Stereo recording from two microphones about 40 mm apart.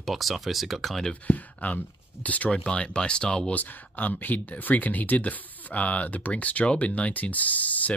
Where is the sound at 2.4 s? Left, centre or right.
Left.